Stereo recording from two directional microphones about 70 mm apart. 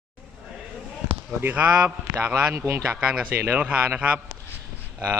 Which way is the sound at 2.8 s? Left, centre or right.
Centre.